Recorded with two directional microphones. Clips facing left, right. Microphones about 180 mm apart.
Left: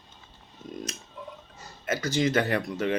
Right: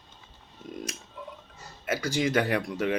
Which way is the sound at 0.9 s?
10° right (ahead or behind).